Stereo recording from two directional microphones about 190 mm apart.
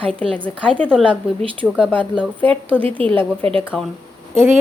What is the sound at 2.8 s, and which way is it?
Speech, 30° right (ahead or behind).